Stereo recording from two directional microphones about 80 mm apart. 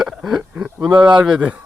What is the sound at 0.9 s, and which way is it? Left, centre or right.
Speech, right.